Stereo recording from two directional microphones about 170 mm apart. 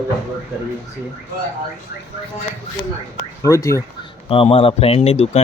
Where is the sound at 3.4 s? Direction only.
20° left (ahead or behind).